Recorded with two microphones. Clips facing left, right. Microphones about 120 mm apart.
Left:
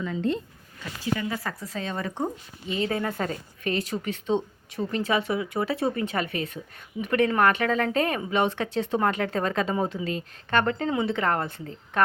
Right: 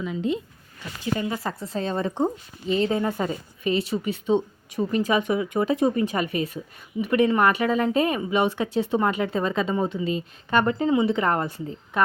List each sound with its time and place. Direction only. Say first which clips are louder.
0.0 s a woman's voice: right 1 dB; 10° right (ahead or behind)
1.0 s a woman's voice: right 2 dB; 25° right (ahead or behind)
3.2 s a woman's voice: right 3 dB; 5° right (ahead or behind)
10.5 s a woman's voice: right 3 dB; 10° right (ahead or behind)